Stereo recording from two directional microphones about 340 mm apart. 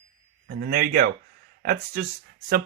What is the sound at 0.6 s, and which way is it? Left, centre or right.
Speech, right.